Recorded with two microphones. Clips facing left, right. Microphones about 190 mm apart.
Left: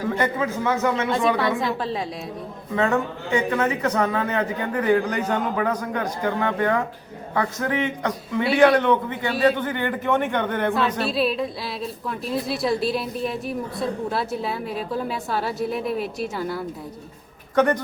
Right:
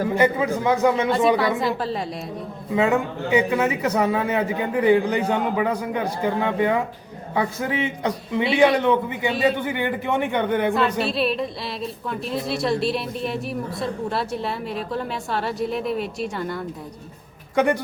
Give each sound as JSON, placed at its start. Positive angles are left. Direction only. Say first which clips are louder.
{"t": 0.1, "sound": "a man's voice", "louder": "right 3 dB", "side_deg": -10}
{"t": 1.4, "sound": "a woman's voice", "louder": "right 1 dB", "side_deg": 0}
{"t": 10.8, "sound": "a woman's voice", "louder": "right 1 dB", "side_deg": 0}
{"t": 17.5, "sound": "speech", "louder": "left 1 dB", "side_deg": -10}